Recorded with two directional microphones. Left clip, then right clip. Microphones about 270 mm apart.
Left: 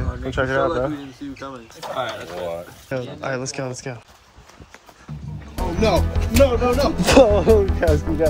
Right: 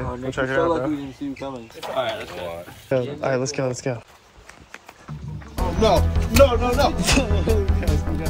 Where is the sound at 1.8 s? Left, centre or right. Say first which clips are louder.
Right 1 dB; left.